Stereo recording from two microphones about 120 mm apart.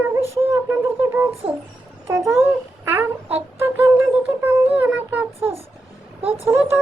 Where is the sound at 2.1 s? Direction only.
20° right (ahead or behind).